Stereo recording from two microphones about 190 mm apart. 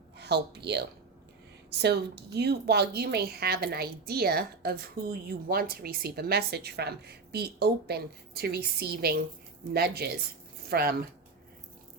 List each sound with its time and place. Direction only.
0.2 s a woman's voice: 60° right (ahead or behind)